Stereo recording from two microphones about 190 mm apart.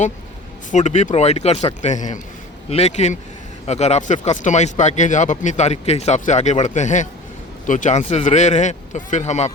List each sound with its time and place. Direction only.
0.7 s speech: 40° left (ahead or behind)